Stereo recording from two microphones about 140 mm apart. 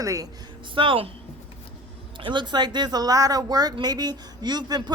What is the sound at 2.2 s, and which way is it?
Speech, 35° right (ahead or behind).